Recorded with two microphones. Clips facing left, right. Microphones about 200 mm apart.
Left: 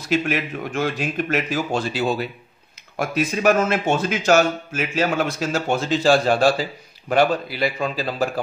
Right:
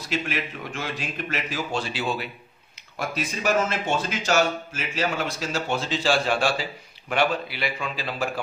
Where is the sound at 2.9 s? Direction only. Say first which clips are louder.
Left 7 dB; 55° left (ahead or behind).